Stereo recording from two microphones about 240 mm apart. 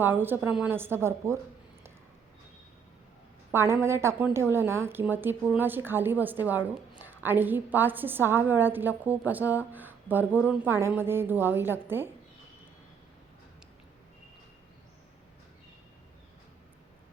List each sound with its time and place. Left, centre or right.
0.0 s a woman's voice: centre
3.5 s a woman's voice: centre